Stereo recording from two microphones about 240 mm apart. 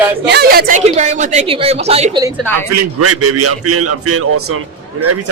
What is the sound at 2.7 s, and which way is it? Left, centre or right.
A man's voice, right.